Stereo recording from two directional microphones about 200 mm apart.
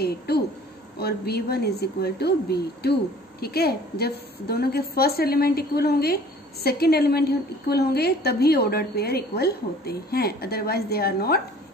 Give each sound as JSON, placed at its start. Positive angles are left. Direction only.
{"t": 0.3, "sound": "a woman's voice", "side_deg": 50}